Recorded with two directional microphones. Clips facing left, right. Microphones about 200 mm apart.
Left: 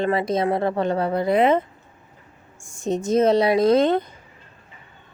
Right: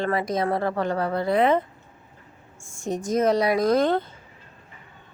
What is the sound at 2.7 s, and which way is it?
A woman's voice, 20° left (ahead or behind).